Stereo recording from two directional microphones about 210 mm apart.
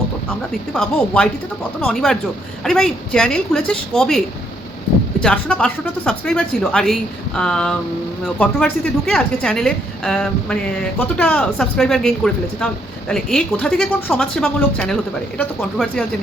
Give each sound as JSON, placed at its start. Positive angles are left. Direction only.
{"t": 0.7, "sound": "speech", "side_deg": 5}
{"t": 5.2, "sound": "speech", "side_deg": 5}